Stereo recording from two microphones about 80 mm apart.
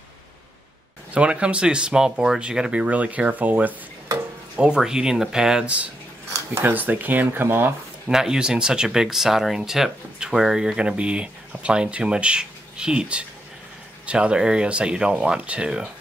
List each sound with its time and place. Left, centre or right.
1.1 s speech: centre
4.6 s speech: centre
6.6 s speech: right
8.1 s speech: centre